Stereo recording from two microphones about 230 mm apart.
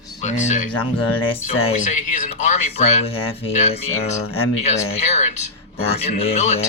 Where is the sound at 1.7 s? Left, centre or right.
Left.